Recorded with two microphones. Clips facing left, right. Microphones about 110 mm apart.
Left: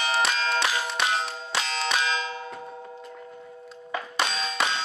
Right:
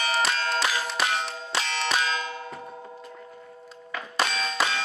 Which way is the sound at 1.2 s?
Centre (ahead or behind).